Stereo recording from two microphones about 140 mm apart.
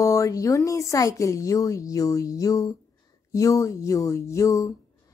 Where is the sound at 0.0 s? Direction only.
25° left (ahead or behind).